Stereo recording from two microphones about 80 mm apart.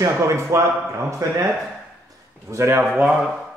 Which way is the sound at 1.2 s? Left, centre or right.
Right.